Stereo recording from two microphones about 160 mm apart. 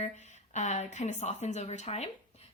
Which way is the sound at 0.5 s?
45° left (ahead or behind).